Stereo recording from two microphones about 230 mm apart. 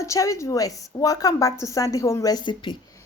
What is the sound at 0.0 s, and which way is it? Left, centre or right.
A woman's voice, centre.